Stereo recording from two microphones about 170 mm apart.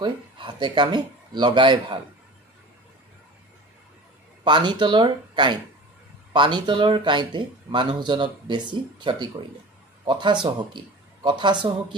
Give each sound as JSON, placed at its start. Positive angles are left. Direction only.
{"t": 0.0, "sound": "speech", "side_deg": -25}
{"t": 4.5, "sound": "speech", "side_deg": -25}